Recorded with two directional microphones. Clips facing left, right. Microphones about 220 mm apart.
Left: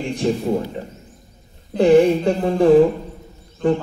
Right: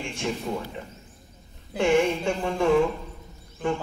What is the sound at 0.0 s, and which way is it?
A man's voice, 35° left (ahead or behind).